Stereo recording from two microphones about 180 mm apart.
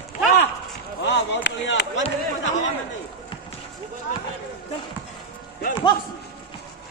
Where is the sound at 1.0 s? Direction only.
80° left.